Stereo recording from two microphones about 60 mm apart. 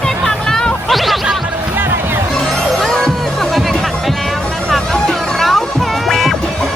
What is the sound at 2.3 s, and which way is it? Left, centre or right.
Music, centre.